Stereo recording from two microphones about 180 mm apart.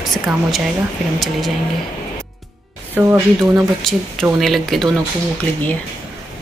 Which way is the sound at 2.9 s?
15° right (ahead or behind).